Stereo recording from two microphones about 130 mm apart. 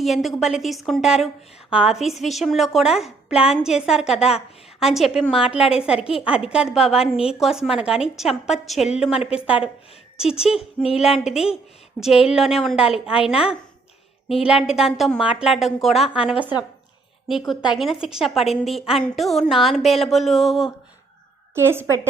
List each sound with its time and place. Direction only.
0.0 s a woman's voice: centre (ahead or behind)
10.2 s a woman's voice: 5° right (ahead or behind)
14.4 s a woman's voice: 5° right (ahead or behind)
21.5 s a woman's voice: 20° right (ahead or behind)